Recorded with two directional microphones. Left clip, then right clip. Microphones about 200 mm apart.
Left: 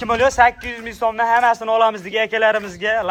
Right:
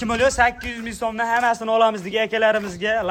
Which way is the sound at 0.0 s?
5° right (ahead or behind).